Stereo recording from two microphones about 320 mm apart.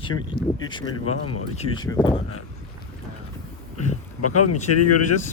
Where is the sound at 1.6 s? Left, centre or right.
Centre.